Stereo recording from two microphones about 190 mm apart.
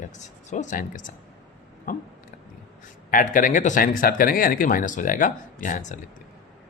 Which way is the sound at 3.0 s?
45° left (ahead or behind).